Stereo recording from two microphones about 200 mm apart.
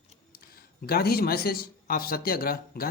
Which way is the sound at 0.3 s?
50° left (ahead or behind).